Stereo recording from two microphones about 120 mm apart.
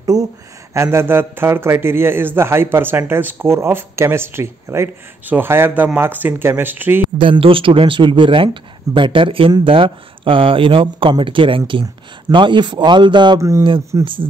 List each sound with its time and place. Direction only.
0.0 s a man's voice: 30° right (ahead or behind)
7.2 s speech: 45° right (ahead or behind)
13.4 s a man's voice: 25° right (ahead or behind)